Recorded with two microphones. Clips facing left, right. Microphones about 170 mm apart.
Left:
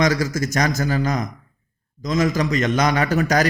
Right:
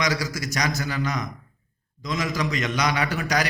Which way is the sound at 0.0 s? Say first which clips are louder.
Left 7 dB; 45° left (ahead or behind).